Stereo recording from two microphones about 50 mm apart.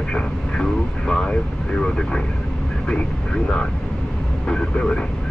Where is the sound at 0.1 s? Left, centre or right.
Centre.